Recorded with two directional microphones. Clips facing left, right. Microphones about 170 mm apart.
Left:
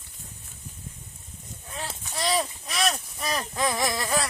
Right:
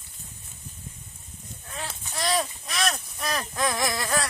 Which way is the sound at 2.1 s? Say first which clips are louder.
Even; 5° left (ahead or behind).